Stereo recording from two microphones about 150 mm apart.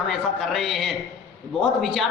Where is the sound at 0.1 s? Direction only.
Centre (ahead or behind).